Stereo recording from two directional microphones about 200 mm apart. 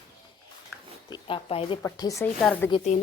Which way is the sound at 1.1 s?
25° left (ahead or behind).